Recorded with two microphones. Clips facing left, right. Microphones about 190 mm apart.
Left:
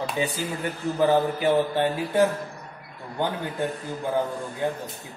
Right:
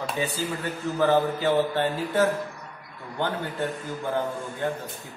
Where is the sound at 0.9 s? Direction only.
15° left (ahead or behind).